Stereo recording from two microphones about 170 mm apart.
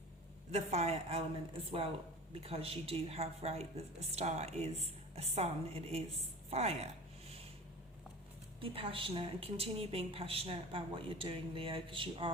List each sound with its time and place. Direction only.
0.5 s a woman's voice: 40° right (ahead or behind)
2.4 s a woman's voice: 35° right (ahead or behind)
6.5 s a sound: 40° right (ahead or behind)
8.6 s a woman's voice: 35° right (ahead or behind)